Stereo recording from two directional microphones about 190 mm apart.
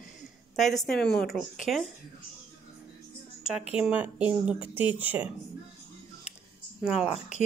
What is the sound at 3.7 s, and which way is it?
Speech, 5° right (ahead or behind).